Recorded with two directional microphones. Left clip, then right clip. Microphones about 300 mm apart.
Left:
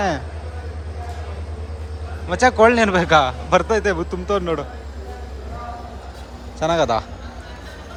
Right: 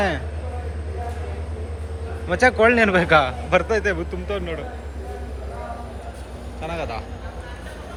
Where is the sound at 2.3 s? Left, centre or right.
Centre.